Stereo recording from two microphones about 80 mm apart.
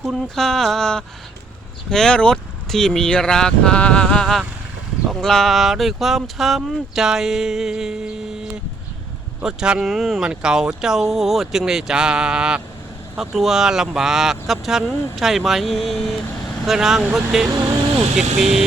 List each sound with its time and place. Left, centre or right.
0.1 s speech: centre
9.4 s speech: centre